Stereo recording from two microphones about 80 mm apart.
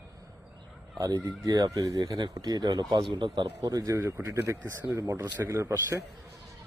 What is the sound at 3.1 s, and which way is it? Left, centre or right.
Speech, right.